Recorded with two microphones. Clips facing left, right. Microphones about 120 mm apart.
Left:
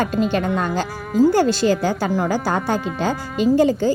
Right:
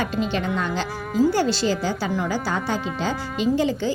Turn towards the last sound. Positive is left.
turn(degrees=45)  # may be behind; listen again after turning